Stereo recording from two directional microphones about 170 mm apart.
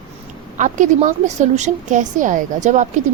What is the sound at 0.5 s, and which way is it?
A woman's voice, 50° right (ahead or behind).